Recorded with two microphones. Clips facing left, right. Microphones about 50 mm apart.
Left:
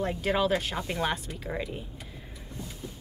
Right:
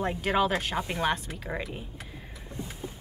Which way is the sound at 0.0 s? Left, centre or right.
Centre.